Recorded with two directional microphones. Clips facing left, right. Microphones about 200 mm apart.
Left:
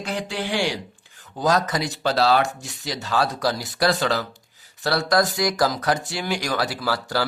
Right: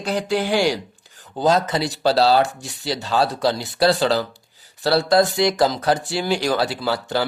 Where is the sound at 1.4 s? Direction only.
25° right (ahead or behind).